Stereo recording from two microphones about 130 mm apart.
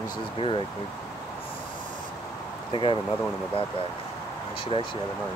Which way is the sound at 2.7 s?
40° left (ahead or behind).